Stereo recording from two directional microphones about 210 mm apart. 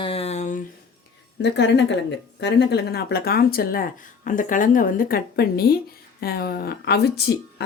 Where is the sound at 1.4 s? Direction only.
55° left (ahead or behind).